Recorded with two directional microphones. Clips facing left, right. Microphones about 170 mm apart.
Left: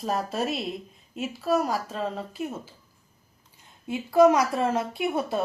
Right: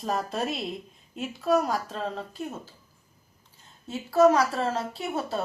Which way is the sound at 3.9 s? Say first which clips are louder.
Left 1 dB; 10° left (ahead or behind).